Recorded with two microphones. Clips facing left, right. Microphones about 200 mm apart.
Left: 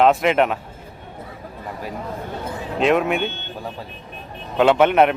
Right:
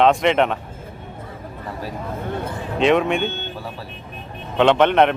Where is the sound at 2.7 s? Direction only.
Centre (ahead or behind).